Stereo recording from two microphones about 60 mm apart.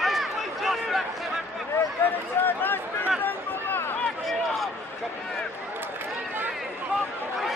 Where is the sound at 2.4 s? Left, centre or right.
Left.